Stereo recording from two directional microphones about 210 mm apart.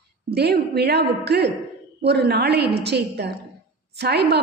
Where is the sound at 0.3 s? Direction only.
50° right (ahead or behind).